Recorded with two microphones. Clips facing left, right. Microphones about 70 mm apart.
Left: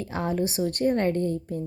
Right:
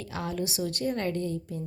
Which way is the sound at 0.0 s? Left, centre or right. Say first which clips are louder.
Left 5 dB; left.